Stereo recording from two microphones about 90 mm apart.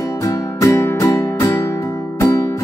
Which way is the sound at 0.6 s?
35° left (ahead or behind).